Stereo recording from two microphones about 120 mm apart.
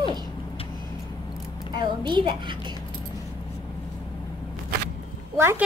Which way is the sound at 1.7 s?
40° right (ahead or behind).